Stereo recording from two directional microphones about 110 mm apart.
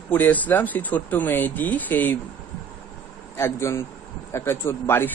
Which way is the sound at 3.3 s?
25° left (ahead or behind).